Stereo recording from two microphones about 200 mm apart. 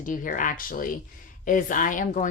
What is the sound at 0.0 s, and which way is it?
Speech, 40° left (ahead or behind).